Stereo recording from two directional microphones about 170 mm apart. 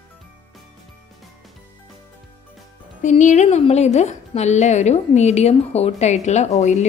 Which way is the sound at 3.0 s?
45° left (ahead or behind).